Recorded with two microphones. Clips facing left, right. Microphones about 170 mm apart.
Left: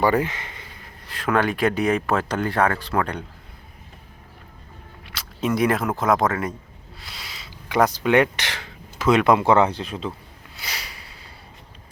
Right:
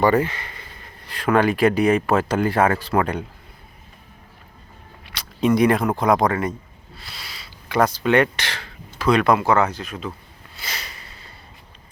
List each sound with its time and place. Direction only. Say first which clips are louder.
0.0 s speech: right 2 dB; 15° left (ahead or behind)
0.8 s speech: right 1 dB; centre (ahead or behind)
5.0 s speech: right 5 dB; 5° left (ahead or behind)
6.9 s speech: right 1 dB; 15° left (ahead or behind)
10.5 s a sound: right 1 dB; 15° left (ahead or behind)